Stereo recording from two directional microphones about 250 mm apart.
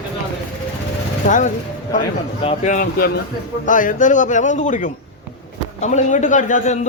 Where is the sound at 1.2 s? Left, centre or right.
Left.